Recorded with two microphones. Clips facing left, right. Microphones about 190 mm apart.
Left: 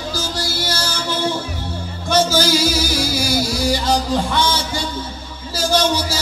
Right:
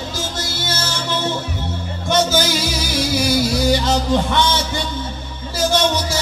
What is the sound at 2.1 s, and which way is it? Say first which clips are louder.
Music: left 1 dB; 20° right (ahead or behind).